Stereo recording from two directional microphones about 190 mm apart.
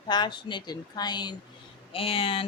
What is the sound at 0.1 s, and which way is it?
Speech, 25° left (ahead or behind).